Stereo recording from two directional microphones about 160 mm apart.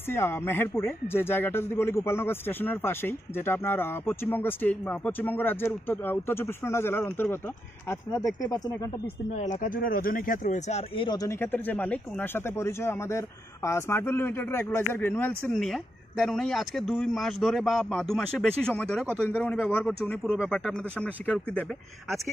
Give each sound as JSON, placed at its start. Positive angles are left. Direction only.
{"t": 0.1, "sound": "speech", "side_deg": 15}
{"t": 9.0, "sound": "speech", "side_deg": 45}
{"t": 11.1, "sound": "speech", "side_deg": 20}
{"t": 15.5, "sound": "speech", "side_deg": 0}